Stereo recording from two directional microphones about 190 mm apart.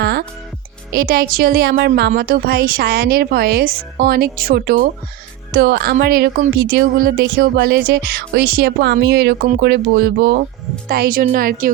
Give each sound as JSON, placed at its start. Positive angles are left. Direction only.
{"t": 0.0, "sound": "music", "side_deg": -60}
{"t": 0.9, "sound": "a woman's voice", "side_deg": -55}